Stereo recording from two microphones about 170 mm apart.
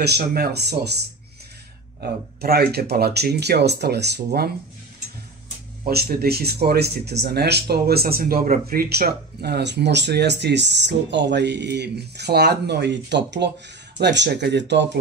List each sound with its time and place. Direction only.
0.0 s speech: 70° right (ahead or behind)
2.0 s speech: 65° right (ahead or behind)
5.9 s speech: 65° right (ahead or behind); by 14.9 s 90° right